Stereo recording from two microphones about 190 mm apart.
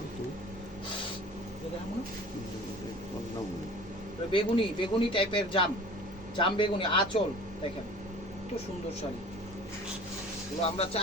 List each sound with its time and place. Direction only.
4.3 s a man's voice: 30° left (ahead or behind)
10.6 s speech: 30° left (ahead or behind)